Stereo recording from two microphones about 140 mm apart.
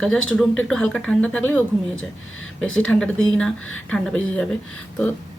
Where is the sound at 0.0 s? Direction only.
5° left (ahead or behind).